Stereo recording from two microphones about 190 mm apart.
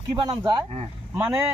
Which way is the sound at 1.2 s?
15° right (ahead or behind).